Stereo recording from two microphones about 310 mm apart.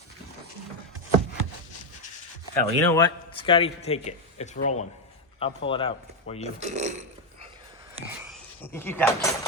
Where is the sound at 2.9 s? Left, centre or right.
Centre.